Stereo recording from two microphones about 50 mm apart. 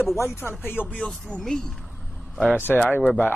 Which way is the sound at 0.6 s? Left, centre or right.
Left.